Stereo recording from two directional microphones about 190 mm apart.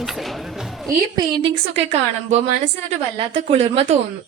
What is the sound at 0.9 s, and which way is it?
Speech, 20° right (ahead or behind).